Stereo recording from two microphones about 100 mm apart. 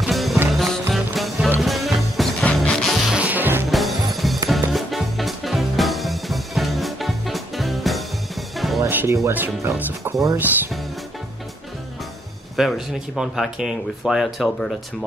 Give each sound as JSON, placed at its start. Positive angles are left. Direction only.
{"t": 0.0, "sound": "music", "side_deg": 0}
{"t": 2.4, "sound": "music", "side_deg": 10}
{"t": 3.6, "sound": "music", "side_deg": 0}
{"t": 8.8, "sound": "music", "side_deg": -25}
{"t": 12.5, "sound": "speech", "side_deg": -5}